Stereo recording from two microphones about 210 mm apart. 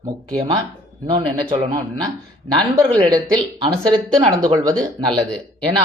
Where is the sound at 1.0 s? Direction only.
25° right (ahead or behind).